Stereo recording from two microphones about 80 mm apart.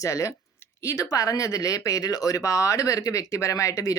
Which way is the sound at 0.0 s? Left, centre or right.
Left.